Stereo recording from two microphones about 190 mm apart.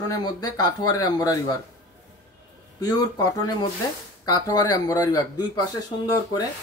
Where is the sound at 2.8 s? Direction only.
20° left (ahead or behind).